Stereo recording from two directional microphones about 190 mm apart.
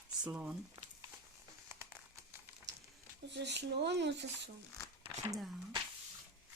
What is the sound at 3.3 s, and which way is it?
Speech, 65° right (ahead or behind).